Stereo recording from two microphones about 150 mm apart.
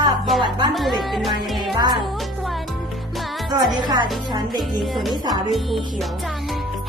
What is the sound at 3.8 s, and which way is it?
Speech, 30° right (ahead or behind).